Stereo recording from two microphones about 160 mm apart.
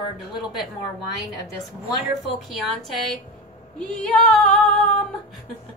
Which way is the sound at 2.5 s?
Centre (ahead or behind).